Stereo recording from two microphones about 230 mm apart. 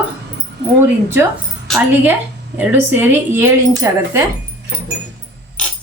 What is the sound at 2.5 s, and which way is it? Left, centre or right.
Speech, centre.